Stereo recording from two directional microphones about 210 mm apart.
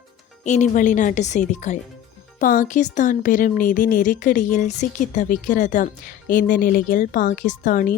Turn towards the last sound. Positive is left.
turn(degrees=40)  # may be behind; listen again after turning